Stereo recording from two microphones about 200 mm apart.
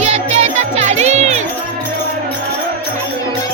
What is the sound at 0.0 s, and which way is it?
Music, 35° right (ahead or behind).